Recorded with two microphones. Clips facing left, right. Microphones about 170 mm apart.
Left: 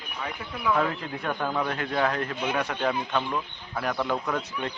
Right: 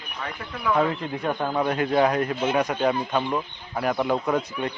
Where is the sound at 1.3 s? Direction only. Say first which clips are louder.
Right 4 dB; 20° right (ahead or behind).